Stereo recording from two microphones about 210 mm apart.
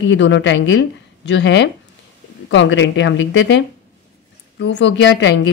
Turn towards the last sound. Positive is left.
turn(degrees=60)  # may be behind; listen again after turning